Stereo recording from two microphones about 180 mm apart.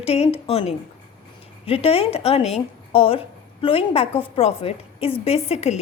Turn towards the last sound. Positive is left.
turn(degrees=35)  # may be behind; listen again after turning